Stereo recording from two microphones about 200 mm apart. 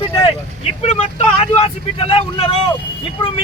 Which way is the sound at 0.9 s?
30° left (ahead or behind).